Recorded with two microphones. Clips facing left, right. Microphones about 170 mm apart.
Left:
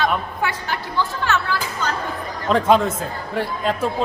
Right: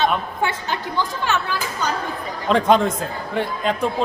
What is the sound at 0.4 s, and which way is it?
Speech, 20° right (ahead or behind).